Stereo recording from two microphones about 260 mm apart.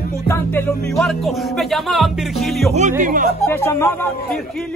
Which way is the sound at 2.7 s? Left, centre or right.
Right.